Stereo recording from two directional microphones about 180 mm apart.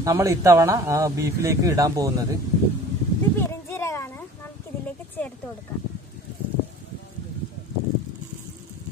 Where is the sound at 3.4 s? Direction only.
15° left (ahead or behind).